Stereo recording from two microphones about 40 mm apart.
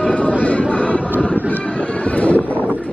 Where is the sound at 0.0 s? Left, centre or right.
Left.